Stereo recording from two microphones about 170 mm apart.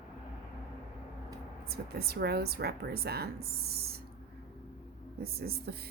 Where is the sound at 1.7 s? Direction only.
65° right (ahead or behind).